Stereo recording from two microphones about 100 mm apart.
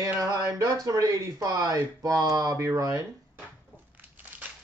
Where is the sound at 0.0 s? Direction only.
35° right (ahead or behind).